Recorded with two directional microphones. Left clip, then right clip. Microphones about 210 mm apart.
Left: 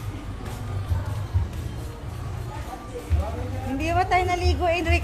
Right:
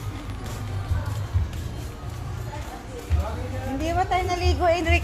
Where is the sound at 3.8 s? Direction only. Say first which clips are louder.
Left 2 dB; 15° left (ahead or behind).